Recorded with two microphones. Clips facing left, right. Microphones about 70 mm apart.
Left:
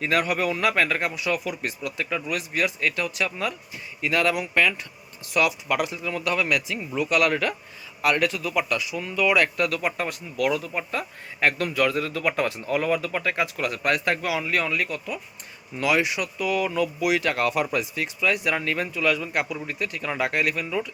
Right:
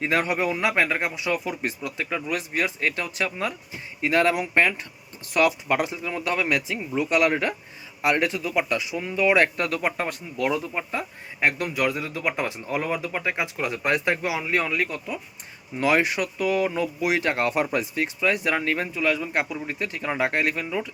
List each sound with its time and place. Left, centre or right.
0.0 s speech: right